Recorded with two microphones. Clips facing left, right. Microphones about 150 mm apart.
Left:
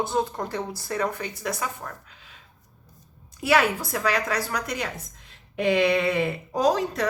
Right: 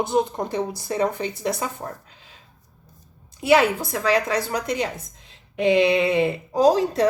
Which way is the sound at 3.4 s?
25° right (ahead or behind).